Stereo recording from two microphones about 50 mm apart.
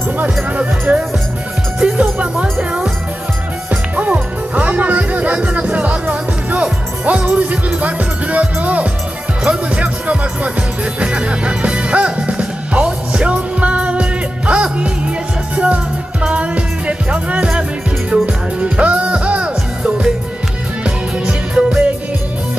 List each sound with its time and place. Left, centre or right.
0.9 s speech: right
1.8 s music: centre
7.8 s speech: right
11.0 s music: right
18.6 s music: right
21.5 s music: centre